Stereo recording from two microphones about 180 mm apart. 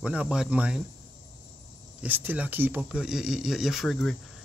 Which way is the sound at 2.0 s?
10° right (ahead or behind).